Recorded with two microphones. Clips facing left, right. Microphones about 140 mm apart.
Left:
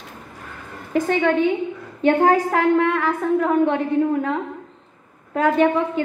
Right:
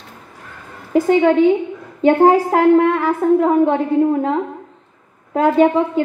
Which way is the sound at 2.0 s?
30° right (ahead or behind).